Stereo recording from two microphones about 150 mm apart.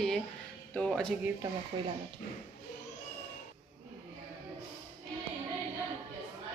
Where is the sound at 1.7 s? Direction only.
30° right (ahead or behind).